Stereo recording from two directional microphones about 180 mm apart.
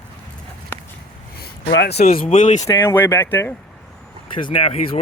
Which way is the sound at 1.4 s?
65° left (ahead or behind).